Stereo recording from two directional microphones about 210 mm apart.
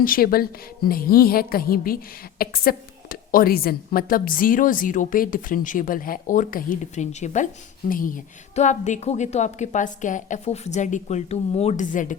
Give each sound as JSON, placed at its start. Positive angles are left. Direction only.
{"t": 0.0, "sound": "a woman's voice", "side_deg": 45}